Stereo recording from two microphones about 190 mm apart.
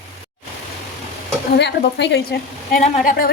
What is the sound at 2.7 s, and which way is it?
Speech, 45° left (ahead or behind).